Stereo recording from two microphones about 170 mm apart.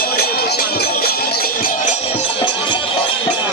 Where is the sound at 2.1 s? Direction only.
35° left (ahead or behind).